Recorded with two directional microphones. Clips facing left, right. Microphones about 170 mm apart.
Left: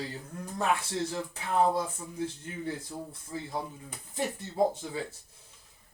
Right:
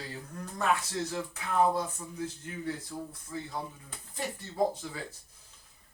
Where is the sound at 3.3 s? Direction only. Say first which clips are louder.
Left 2 dB; 30° left (ahead or behind).